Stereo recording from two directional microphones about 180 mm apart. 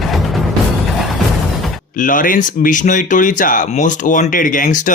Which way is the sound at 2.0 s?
50° left (ahead or behind).